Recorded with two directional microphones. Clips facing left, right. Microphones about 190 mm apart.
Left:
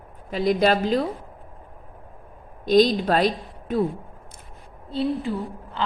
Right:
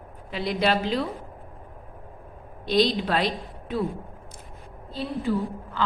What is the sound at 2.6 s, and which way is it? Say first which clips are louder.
A woman's voice: left 5 dB; 45° left (ahead or behind).